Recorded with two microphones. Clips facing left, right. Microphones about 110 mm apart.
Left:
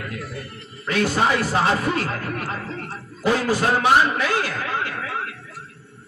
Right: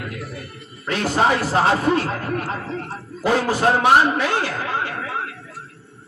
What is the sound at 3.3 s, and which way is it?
Speech, 30° right (ahead or behind).